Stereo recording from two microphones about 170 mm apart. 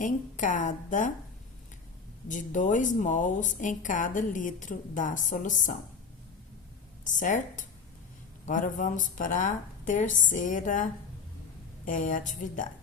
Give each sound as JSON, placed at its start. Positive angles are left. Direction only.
{"t": 0.0, "sound": "a woman's voice", "side_deg": 50}
{"t": 2.2, "sound": "a woman's voice", "side_deg": 50}
{"t": 7.0, "sound": "a woman's voice", "side_deg": 50}
{"t": 11.9, "sound": "a woman's voice", "side_deg": 50}